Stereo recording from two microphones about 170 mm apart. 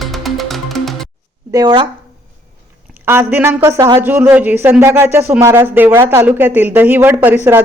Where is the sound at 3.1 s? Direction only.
15° right (ahead or behind).